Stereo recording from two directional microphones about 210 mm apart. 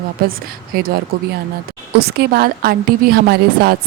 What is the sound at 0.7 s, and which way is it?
Speech, 45° right (ahead or behind).